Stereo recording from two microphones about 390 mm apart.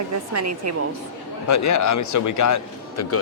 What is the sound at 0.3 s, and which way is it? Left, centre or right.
Speech, right.